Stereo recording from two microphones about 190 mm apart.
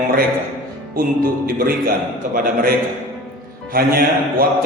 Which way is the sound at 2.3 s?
45° right (ahead or behind).